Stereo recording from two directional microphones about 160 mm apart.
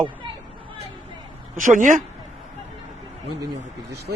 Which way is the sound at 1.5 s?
55° right (ahead or behind).